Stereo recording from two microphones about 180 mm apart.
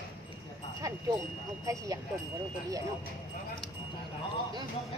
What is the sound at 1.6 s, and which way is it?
Speech, 20° right (ahead or behind).